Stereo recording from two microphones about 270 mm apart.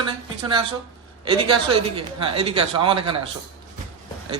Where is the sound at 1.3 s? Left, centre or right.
Right.